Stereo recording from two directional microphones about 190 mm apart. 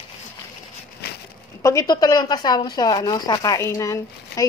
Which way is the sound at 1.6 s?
15° left (ahead or behind).